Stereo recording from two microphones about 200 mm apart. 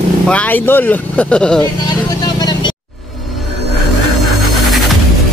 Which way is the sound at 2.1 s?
20° left (ahead or behind).